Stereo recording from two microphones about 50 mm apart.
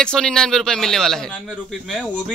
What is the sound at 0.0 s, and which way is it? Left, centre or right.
A man's voice, centre.